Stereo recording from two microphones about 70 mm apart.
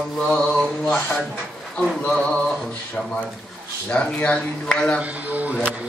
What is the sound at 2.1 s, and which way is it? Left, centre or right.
Male singing, centre.